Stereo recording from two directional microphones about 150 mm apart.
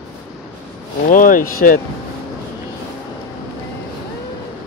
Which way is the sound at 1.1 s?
65° left (ahead or behind).